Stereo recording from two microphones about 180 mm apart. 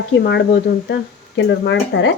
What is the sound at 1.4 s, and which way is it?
Speech, 85° left.